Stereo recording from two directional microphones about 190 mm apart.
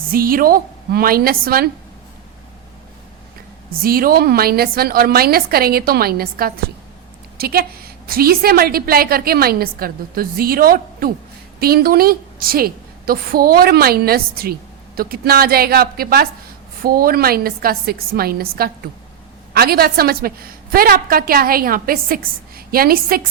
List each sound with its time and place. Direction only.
0.1 s a woman's voice: 50° right (ahead or behind)
3.8 s a woman's voice: 50° right (ahead or behind)